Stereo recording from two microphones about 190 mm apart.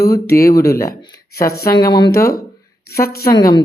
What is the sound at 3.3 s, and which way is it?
Speech, 20° left (ahead or behind).